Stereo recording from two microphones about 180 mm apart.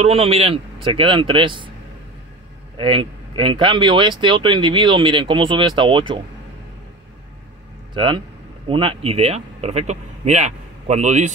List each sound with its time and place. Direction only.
0.0 s speech: 35° right (ahead or behind)
2.8 s speech: 30° right (ahead or behind)
7.9 s speech: 25° right (ahead or behind)